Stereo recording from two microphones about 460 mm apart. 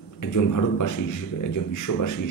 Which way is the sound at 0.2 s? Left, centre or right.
Left.